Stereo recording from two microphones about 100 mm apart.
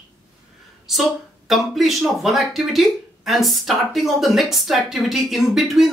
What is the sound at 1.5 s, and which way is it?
Speech, centre (ahead or behind).